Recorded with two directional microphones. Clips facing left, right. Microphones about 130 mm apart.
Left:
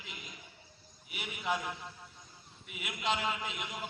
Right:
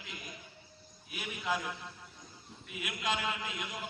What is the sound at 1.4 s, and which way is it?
Speech, 20° left (ahead or behind).